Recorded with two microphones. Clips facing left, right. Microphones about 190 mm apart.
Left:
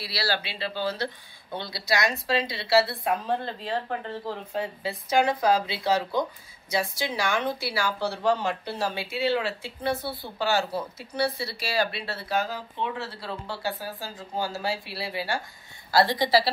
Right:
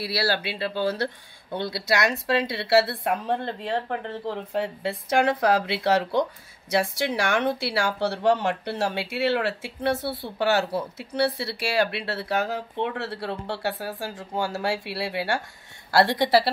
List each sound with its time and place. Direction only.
0.0 s speech: 55° right (ahead or behind)